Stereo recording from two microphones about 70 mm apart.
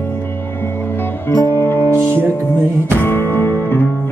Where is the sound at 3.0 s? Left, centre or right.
Left.